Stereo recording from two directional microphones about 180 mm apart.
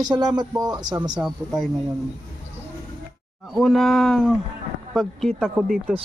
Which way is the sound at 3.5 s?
Centre (ahead or behind).